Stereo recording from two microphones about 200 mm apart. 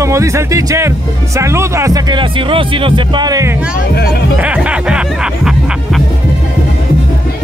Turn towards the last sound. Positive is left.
turn(degrees=-5)  # may be behind; listen again after turning